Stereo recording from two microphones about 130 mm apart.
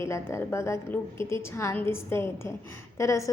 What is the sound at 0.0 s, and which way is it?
A woman's voice, 20° left (ahead or behind).